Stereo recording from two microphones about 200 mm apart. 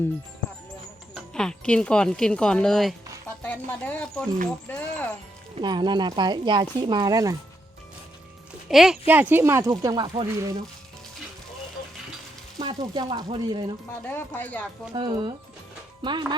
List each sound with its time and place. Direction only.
1.1 s speech: 5° left (ahead or behind)
5.5 s speech: 20° right (ahead or behind)
8.7 s speech: centre (ahead or behind)
12.5 s speech: 25° right (ahead or behind)
14.1 s speech: 10° left (ahead or behind)
14.9 s speech: 25° right (ahead or behind)